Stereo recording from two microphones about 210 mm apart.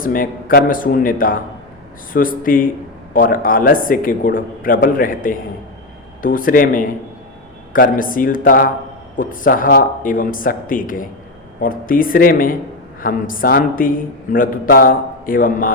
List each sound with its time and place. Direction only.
0.0 s a man's voice: 40° left (ahead or behind)